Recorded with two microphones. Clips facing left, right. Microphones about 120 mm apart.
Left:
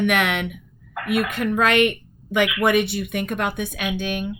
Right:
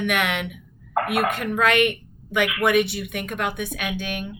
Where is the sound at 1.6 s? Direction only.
25° left (ahead or behind).